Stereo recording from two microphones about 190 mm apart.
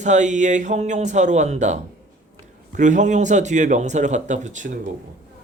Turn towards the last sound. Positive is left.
turn(degrees=-40)  # may be behind; listen again after turning